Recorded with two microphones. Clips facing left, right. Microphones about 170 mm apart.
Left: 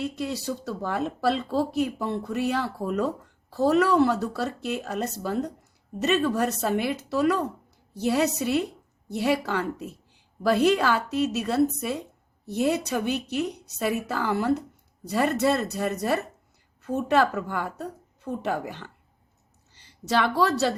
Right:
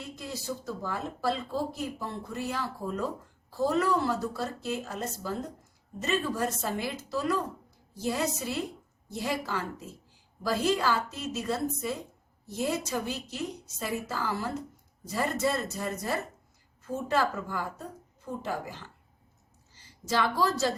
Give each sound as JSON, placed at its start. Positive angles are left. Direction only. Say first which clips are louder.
{"t": 0.0, "sound": "a woman's voice", "louder": "left 9 dB", "side_deg": 70}